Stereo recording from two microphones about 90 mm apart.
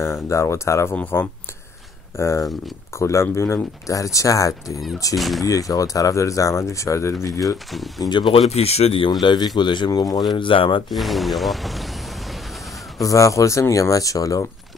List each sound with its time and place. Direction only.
0.0 s speech: 30° left (ahead or behind)
0.9 s speech: 20° left (ahead or behind)
2.1 s speech: 30° left (ahead or behind)
5.1 s speech: centre (ahead or behind)
5.4 s speech: 40° left (ahead or behind)
8.0 s speech: 55° left (ahead or behind)
8.3 s speech: 90° left
9.2 s speech: 60° left (ahead or behind)
9.8 s speech: 45° left (ahead or behind)
10.3 s speech: 70° left (ahead or behind)
10.9 s speech: centre (ahead or behind)
13.0 s speech: 35° left (ahead or behind)